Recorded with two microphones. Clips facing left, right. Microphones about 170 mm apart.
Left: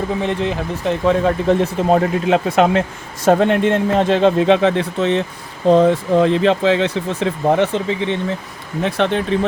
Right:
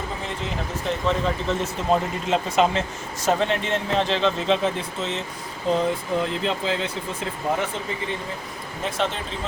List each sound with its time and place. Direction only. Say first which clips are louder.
0.9 s speech: left 8 dB; 55° left (ahead or behind); by 8.2 s 75° left (ahead or behind)
8.8 s speech: left 9 dB; 65° left (ahead or behind)